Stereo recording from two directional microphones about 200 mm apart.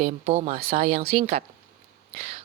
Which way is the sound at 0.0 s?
30° right (ahead or behind).